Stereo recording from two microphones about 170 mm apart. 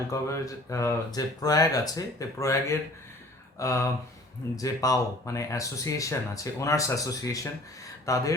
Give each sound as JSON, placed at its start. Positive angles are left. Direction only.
{"t": 0.1, "sound": "speech", "side_deg": 20}